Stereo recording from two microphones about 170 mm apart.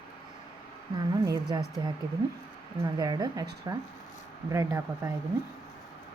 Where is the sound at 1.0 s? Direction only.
20° right (ahead or behind).